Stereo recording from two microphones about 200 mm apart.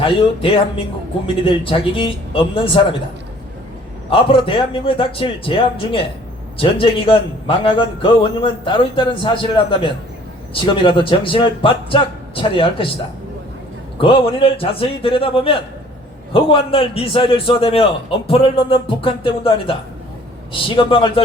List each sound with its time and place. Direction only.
0.0 s a man's voice: 25° left (ahead or behind)
4.1 s a man's voice: 25° left (ahead or behind)
14.0 s a man's voice: 25° left (ahead or behind)